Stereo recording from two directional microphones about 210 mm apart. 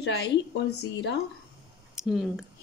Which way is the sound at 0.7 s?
90° left.